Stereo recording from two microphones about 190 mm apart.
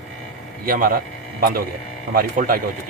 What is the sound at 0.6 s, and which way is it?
A man's voice, 50° right (ahead or behind).